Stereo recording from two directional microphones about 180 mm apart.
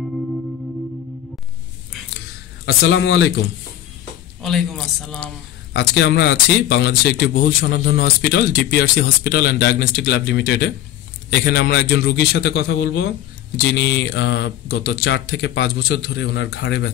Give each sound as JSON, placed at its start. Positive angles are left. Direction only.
{"t": 2.6, "sound": "a man's voice", "side_deg": 90}
{"t": 4.4, "sound": "a man's voice", "side_deg": 0}
{"t": 5.7, "sound": "speech", "side_deg": 80}